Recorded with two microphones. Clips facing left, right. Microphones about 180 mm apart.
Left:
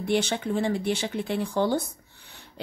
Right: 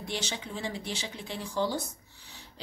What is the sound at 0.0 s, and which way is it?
Speech, 55° left (ahead or behind).